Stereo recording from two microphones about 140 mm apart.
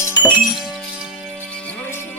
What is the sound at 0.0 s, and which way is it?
Music, 15° left (ahead or behind).